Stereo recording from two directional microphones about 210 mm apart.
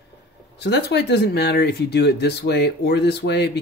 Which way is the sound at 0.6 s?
55° left (ahead or behind).